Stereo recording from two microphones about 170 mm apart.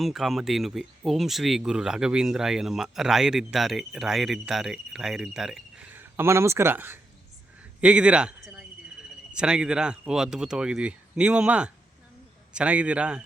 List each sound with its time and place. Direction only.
0.0 s a man's voice: centre (ahead or behind)